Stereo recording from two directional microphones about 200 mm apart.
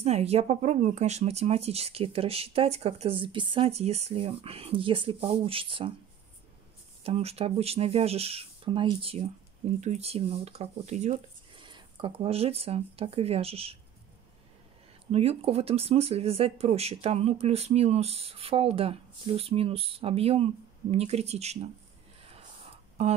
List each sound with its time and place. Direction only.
0.0 s speech: 30° right (ahead or behind)
7.0 s speech: 30° right (ahead or behind)
15.0 s speech: 30° right (ahead or behind)